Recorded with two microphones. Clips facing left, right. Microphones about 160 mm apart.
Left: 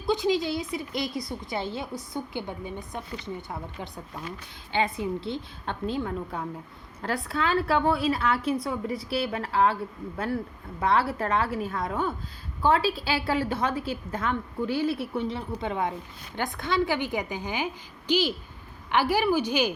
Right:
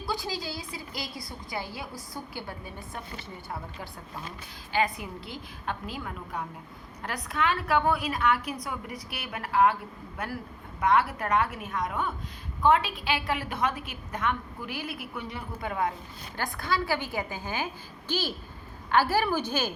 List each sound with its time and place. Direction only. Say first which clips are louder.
0.1 s a woman's voice: left 10 dB; 20° left (ahead or behind)
4.7 s a woman's voice: left 2 dB; 25° left (ahead or behind)